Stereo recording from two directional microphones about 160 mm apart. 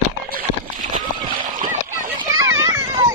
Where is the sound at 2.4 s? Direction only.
20° right (ahead or behind).